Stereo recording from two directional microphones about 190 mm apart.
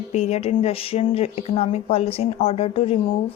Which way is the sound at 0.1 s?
35° left (ahead or behind).